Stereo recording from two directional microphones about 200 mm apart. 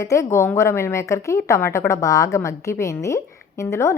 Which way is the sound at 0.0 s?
15° left (ahead or behind).